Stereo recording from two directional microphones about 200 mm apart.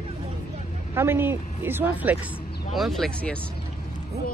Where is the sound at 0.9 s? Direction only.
10° right (ahead or behind); by 3.4 s 5° left (ahead or behind).